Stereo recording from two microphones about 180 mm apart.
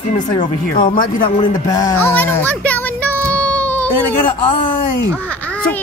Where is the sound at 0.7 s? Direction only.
50° left (ahead or behind).